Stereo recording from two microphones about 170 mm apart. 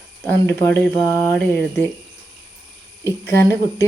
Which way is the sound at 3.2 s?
20° left (ahead or behind).